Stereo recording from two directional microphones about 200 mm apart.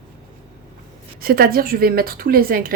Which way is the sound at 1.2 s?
50° right (ahead or behind).